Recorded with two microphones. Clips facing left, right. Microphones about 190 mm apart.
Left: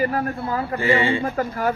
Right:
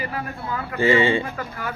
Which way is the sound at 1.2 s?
40° left (ahead or behind).